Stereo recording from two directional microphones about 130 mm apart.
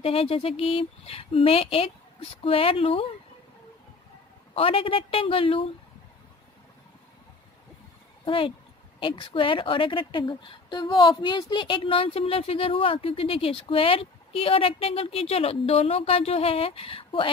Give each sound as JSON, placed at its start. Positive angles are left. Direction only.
{"t": 0.0, "sound": "a woman's voice", "side_deg": 45}
{"t": 4.6, "sound": "a woman's voice", "side_deg": 45}
{"t": 8.3, "sound": "a woman's voice", "side_deg": 40}